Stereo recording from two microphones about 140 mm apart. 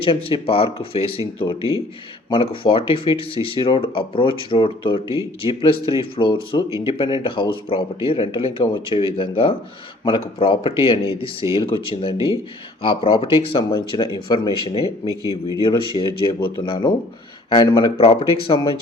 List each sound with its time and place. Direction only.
0.0 s speech: 40° left (ahead or behind)
2.3 s speech: 40° left (ahead or behind)
15.2 s speech: 25° right (ahead or behind)
15.6 s speech: 35° left (ahead or behind)